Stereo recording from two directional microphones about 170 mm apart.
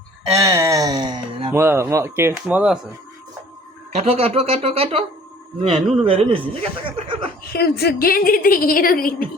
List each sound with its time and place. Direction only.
0.3 s a sound: 20° right (ahead or behind)
1.5 s speech: 15° right (ahead or behind)
3.9 s speech: 35° right (ahead or behind)
6.1 s speech: 35° right (ahead or behind)
7.4 s a woman's voice: 65° left (ahead or behind)